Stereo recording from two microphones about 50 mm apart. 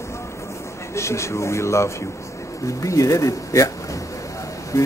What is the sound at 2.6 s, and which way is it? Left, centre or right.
Speech, left.